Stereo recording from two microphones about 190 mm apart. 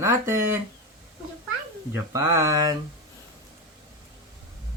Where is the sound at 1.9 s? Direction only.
15° right (ahead or behind).